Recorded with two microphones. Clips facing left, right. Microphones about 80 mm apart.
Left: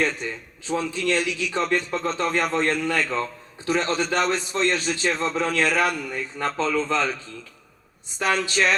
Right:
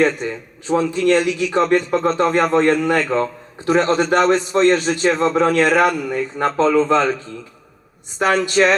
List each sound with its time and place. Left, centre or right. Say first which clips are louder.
0.2 s a man's voice: right 6 dB; right
8.4 s a man's voice: right 7 dB; right